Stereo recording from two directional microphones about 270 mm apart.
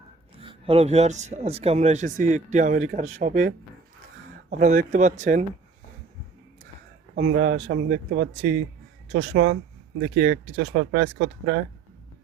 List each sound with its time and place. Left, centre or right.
0.3 s speech: right
7.2 s speech: right
10.2 s speech: right
10.7 s speech: right